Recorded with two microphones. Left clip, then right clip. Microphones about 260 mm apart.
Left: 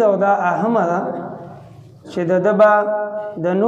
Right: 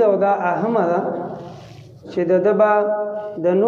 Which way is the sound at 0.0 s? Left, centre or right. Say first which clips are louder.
Left 1 dB; left.